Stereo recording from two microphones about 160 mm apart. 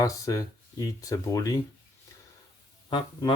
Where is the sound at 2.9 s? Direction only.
30° left (ahead or behind).